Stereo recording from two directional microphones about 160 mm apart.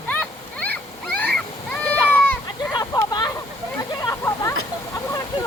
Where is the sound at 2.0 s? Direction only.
10° left (ahead or behind).